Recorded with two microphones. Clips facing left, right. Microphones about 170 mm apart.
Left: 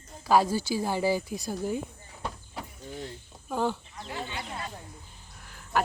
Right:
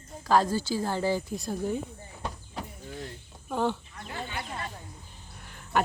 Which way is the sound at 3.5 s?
5° left (ahead or behind).